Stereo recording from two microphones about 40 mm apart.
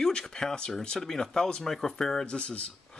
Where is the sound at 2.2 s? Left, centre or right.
Left.